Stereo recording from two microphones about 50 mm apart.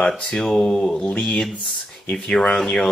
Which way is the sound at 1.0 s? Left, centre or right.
Left.